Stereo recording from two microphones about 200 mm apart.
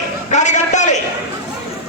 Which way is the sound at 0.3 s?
35° left (ahead or behind).